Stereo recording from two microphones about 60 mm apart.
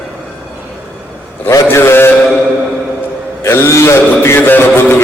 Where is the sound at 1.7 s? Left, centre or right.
Left.